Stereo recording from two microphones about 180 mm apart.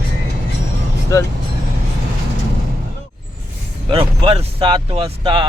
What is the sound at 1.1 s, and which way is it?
Speech, 15° left (ahead or behind).